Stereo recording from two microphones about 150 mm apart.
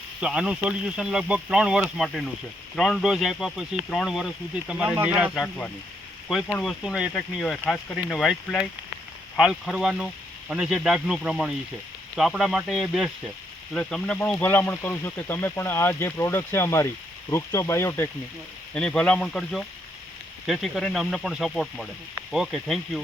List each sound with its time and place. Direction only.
0.2 s speech: 5° right (ahead or behind)
5.3 s speech: 10° left (ahead or behind)
18.7 s speech: 5° left (ahead or behind)